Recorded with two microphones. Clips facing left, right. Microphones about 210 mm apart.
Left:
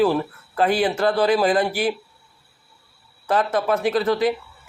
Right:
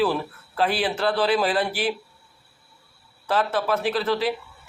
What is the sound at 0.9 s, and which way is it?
Speech, 10° left (ahead or behind).